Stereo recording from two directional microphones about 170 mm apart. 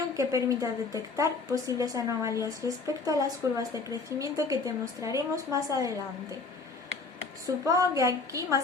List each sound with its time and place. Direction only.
0.2 s a woman's voice: 20° right (ahead or behind)
7.4 s a woman's voice: 20° right (ahead or behind)